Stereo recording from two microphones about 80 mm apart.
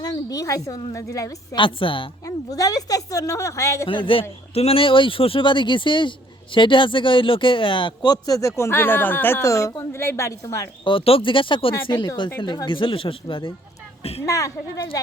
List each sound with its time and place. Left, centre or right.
0.0 s a woman's voice: left
1.5 s speech: left
2.2 s a woman's voice: left
3.8 s speech: left
9.4 s a woman's voice: left
9.7 s a woman's voice: left
10.8 s speech: left
11.9 s speech: left
12.6 s speech: left
14.3 s a woman's voice: left